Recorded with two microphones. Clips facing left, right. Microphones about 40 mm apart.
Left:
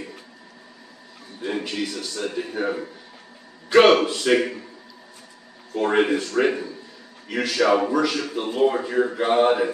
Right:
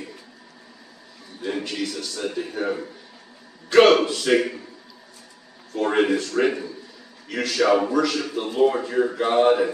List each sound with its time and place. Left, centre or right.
1.4 s a man's voice: centre
5.8 s a man's voice: centre